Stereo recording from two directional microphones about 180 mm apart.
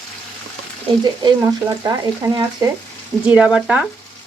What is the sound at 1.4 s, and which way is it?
Speech, 20° right (ahead or behind).